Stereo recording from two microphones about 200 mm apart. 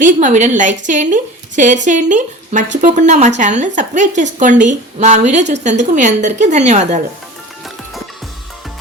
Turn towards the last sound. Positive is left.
turn(degrees=-35)  # may be behind; listen again after turning